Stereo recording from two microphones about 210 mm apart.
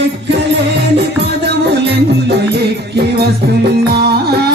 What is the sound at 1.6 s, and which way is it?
Music, 50° right (ahead or behind).